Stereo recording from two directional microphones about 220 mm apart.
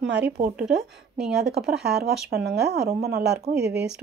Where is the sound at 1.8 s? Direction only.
45° right (ahead or behind).